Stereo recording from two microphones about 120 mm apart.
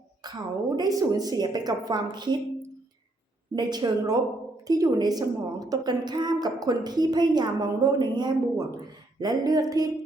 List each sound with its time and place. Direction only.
0.8 s a woman's voice: 30° right (ahead or behind)
3.5 s a woman's voice: 35° right (ahead or behind)